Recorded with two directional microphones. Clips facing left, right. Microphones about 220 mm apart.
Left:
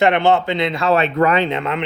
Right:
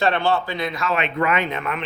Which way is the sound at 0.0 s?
20° left (ahead or behind).